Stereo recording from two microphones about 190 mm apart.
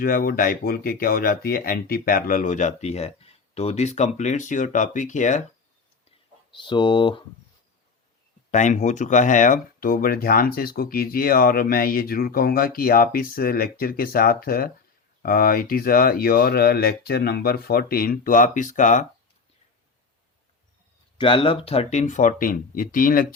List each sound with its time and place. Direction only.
0.0 s speech: 50° left (ahead or behind)
6.5 s speech: 25° left (ahead or behind)
8.4 s speech: 40° left (ahead or behind)
21.2 s speech: 25° left (ahead or behind); by 23.2 s 45° left (ahead or behind)